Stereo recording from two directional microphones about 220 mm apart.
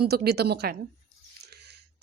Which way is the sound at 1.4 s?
50° right (ahead or behind).